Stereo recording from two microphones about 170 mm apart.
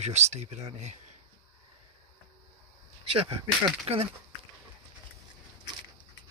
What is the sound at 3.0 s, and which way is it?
Speech, 35° right (ahead or behind).